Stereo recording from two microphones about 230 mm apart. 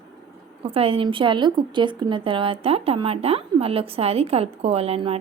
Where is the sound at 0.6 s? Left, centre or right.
Right.